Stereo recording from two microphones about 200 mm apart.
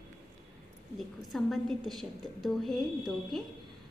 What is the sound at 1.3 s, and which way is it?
A woman's voice, centre (ahead or behind).